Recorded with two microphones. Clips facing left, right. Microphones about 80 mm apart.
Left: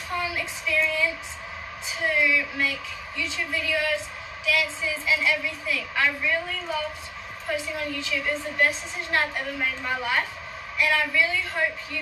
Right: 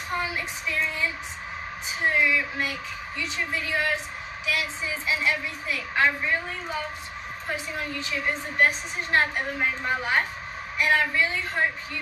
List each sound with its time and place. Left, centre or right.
0.1 s a woman's voice: right